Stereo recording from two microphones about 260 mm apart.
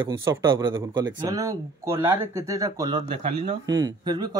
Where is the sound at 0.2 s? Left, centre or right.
Centre.